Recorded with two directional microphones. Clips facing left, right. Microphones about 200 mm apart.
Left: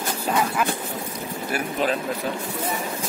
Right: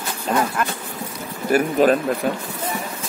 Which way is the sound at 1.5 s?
45° right (ahead or behind).